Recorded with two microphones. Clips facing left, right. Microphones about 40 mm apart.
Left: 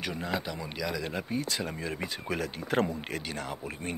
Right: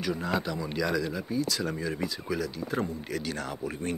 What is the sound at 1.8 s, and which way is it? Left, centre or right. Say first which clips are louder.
Speech: right 3 dB; left.